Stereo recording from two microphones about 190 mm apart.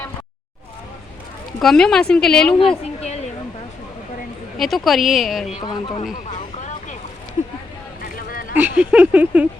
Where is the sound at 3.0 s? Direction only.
35° left (ahead or behind).